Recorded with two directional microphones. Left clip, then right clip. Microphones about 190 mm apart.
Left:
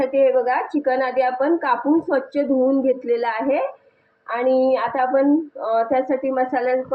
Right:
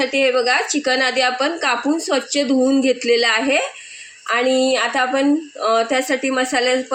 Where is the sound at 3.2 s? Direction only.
80° right.